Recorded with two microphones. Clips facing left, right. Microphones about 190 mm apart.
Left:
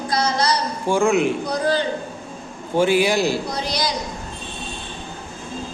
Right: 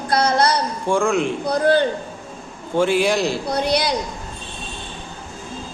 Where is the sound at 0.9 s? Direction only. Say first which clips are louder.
Left 1 dB; 5° left (ahead or behind).